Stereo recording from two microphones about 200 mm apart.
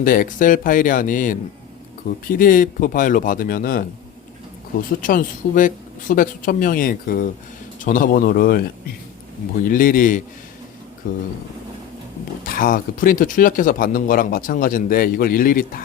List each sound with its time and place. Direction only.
0.0 s speech: 45° left (ahead or behind)
9.6 s speech: 45° left (ahead or behind)
12.5 s speech: 45° left (ahead or behind)